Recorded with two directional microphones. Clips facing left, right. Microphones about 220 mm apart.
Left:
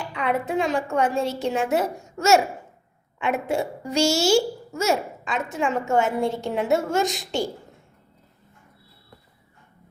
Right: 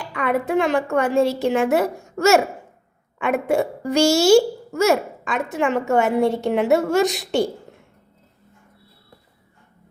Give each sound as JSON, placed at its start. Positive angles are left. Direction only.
{"t": 0.1, "sound": "a woman's voice", "side_deg": -55}